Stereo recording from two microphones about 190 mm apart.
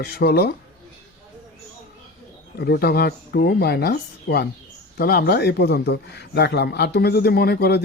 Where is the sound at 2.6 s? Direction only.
55° left (ahead or behind).